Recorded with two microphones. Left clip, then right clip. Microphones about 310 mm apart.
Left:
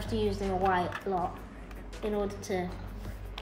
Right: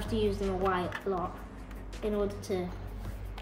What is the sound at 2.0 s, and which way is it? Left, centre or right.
Speech, centre.